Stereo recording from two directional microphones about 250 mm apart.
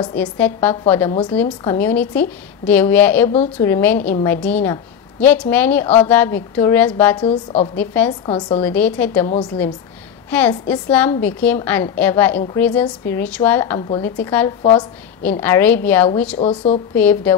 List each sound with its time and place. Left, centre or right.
0.2 s a woman's voice: centre
3.3 s a woman's voice: left
3.6 s a woman's voice: centre
7.2 s a woman's voice: left
7.7 s a woman's voice: centre
8.3 s a woman's voice: centre
8.6 s a woman's voice: centre
13.7 s a woman's voice: centre
14.2 s a woman's voice: centre
14.6 s a woman's voice: left
15.4 s a woman's voice: centre
16.3 s a woman's voice: left
16.9 s a woman's voice: centre